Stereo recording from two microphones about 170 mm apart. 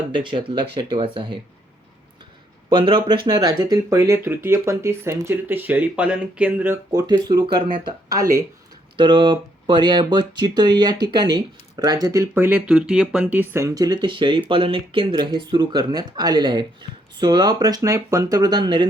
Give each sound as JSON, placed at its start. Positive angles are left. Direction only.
{"t": 0.1, "sound": "speech", "side_deg": -30}
{"t": 2.6, "sound": "speech", "side_deg": -30}
{"t": 6.9, "sound": "speech", "side_deg": -20}